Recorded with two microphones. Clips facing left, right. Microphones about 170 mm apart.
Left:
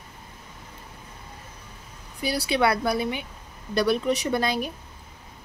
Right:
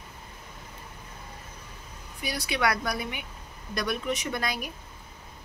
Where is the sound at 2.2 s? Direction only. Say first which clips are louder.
Left 5 dB; 30° left (ahead or behind).